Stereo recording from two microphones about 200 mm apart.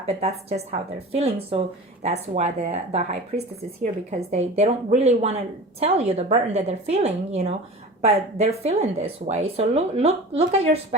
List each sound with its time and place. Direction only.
0.0 s speech: 30° right (ahead or behind)